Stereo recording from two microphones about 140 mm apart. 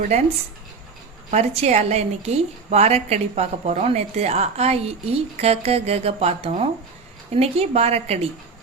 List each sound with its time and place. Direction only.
0.0 s a woman's voice: 50° right (ahead or behind)
1.3 s a woman's voice: 50° right (ahead or behind)